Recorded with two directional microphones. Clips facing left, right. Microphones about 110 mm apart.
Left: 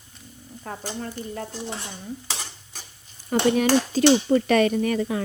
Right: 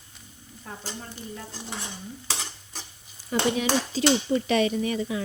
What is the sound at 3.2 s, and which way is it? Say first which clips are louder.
Speech: left 5 dB; 50° left (ahead or behind).